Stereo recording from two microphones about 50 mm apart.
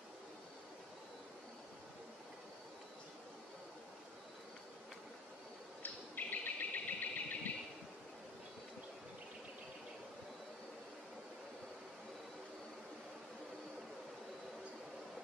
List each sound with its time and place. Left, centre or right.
5.8 s bird: left